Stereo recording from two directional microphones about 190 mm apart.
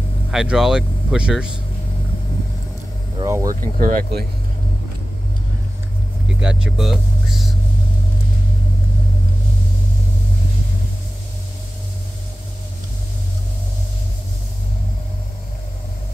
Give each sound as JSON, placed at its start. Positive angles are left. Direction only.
{"t": 0.3, "sound": "speech", "side_deg": 0}
{"t": 3.2, "sound": "vehicle", "side_deg": -15}
{"t": 3.4, "sound": "speech", "side_deg": -45}
{"t": 6.2, "sound": "speech", "side_deg": -5}